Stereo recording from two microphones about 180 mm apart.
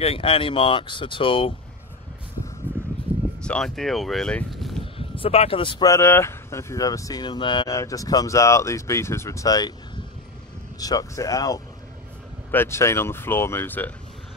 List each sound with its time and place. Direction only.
0.0 s speech: 30° left (ahead or behind)
2.7 s a sound: 10° right (ahead or behind)
3.4 s speech: 5° left (ahead or behind)
4.9 s speech: 30° left (ahead or behind)
10.8 s speech: 20° left (ahead or behind)